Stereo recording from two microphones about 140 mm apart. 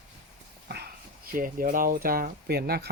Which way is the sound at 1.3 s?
85° right.